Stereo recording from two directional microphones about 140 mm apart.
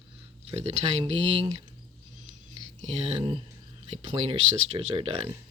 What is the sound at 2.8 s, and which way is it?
Speech, 50° right (ahead or behind).